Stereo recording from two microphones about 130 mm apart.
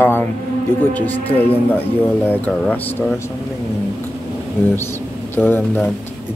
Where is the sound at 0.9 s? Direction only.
15° left (ahead or behind).